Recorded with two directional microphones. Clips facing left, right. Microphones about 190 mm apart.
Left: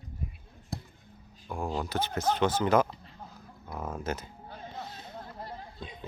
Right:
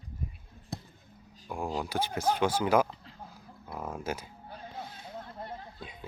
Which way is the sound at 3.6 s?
10° right (ahead or behind).